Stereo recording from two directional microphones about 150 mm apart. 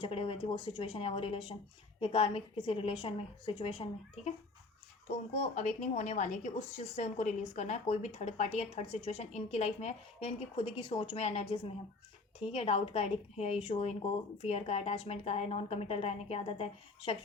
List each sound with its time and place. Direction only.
0.0 s a woman's voice: 40° left (ahead or behind)
5.0 s a woman's voice: 50° left (ahead or behind)